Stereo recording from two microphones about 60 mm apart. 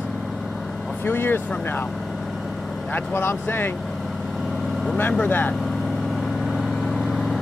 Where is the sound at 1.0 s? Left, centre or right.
Left.